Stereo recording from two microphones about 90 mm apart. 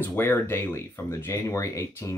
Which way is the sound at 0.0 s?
25° left (ahead or behind).